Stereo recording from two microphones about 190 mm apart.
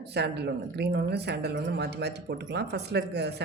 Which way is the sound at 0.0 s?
60° right (ahead or behind).